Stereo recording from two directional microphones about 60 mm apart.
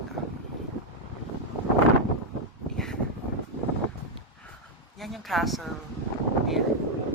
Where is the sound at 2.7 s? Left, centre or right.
Centre.